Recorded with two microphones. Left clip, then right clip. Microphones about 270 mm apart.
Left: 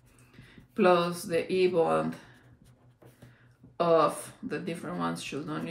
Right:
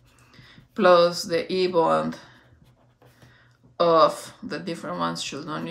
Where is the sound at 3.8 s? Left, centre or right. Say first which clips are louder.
Right 6 dB; centre.